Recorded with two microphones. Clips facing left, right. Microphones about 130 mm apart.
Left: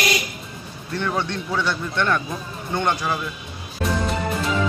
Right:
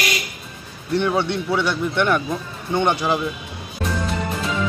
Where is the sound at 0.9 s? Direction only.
20° right (ahead or behind).